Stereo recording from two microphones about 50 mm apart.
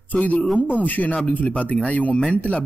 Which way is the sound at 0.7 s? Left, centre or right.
Left.